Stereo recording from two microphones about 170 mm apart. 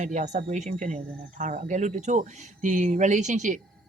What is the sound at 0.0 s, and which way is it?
Speech, 45° right (ahead or behind).